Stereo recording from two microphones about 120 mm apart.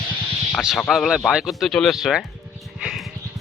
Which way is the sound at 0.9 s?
Centre (ahead or behind).